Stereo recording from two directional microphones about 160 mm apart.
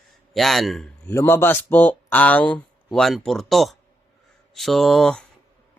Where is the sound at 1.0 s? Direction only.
15° left (ahead or behind).